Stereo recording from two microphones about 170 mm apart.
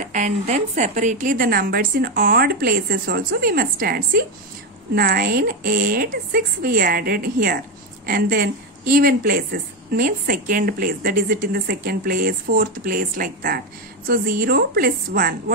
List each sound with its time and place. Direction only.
0.0 s speech: 45° right (ahead or behind)